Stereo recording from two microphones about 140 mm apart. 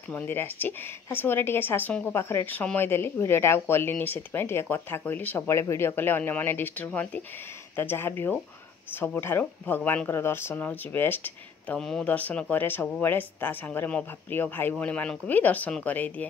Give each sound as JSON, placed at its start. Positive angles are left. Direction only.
{"t": 0.1, "sound": "a woman's voice", "side_deg": 15}